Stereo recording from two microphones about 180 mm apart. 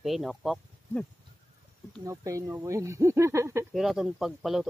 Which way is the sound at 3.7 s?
Centre (ahead or behind).